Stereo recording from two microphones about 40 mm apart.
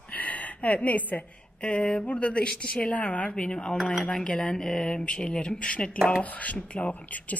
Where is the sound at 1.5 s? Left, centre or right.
Left.